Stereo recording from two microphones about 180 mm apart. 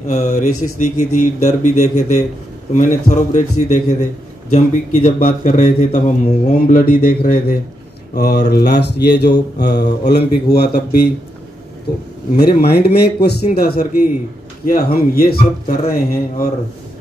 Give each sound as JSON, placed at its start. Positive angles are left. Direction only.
{"t": 0.0, "sound": "a man's voice", "side_deg": 40}
{"t": 8.1, "sound": "mantra", "side_deg": 60}
{"t": 10.0, "sound": "speech", "side_deg": 65}
{"t": 12.4, "sound": "speech", "side_deg": 60}